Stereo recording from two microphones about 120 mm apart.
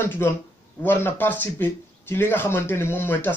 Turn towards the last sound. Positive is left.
turn(degrees=15)  # may be behind; listen again after turning